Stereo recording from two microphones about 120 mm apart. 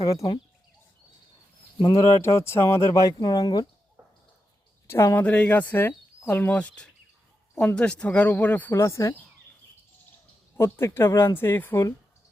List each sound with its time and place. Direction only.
0.0 s speech: 30° left (ahead or behind)
2.0 s speech: 25° left (ahead or behind)
4.9 s speech: 20° left (ahead or behind)
5.2 s speech: 10° left (ahead or behind)
8.7 s speech: 25° left (ahead or behind)
10.6 s speech: 20° left (ahead or behind)